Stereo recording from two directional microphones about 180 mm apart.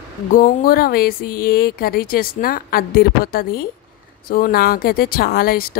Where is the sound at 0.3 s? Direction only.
50° left (ahead or behind).